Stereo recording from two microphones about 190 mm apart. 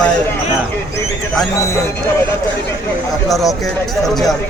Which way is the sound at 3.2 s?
Centre (ahead or behind).